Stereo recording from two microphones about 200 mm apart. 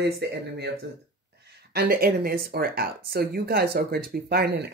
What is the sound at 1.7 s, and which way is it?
Speech, 50° right (ahead or behind).